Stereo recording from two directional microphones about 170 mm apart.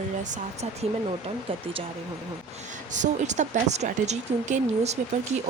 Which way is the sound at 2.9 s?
45° right (ahead or behind).